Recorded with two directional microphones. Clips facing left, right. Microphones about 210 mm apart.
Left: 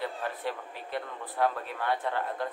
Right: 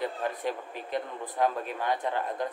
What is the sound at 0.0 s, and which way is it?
Speech, 15° right (ahead or behind).